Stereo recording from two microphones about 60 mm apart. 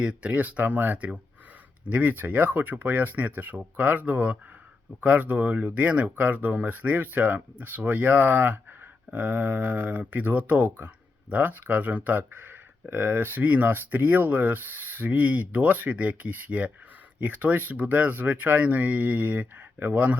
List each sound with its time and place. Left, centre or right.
0.0 s speech: right